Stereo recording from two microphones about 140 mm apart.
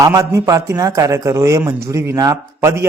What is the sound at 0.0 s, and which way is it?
Speech, 20° right (ahead or behind).